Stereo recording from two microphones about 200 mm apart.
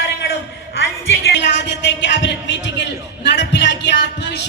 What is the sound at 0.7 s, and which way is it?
A woman's voice, 60° left (ahead or behind).